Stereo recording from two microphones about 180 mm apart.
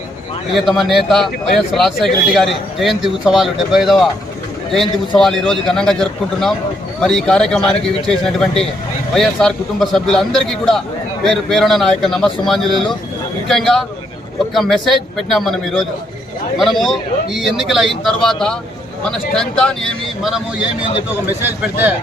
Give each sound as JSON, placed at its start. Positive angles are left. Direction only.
{"t": 0.5, "sound": "a man's voice", "side_deg": 0}